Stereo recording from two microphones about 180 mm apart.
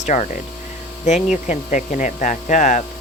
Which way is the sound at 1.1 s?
40° left (ahead or behind).